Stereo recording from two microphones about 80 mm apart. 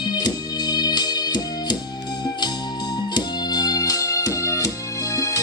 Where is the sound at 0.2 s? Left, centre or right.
Left.